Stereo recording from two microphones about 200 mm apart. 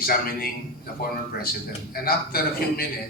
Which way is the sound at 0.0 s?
50° left (ahead or behind).